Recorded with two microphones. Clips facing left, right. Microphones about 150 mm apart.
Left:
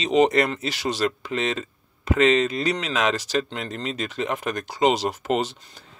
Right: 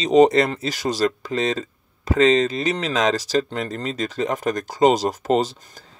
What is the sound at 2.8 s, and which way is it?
Speech, 35° right (ahead or behind).